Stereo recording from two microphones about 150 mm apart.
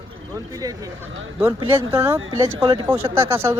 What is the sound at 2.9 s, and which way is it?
Speech, 15° right (ahead or behind).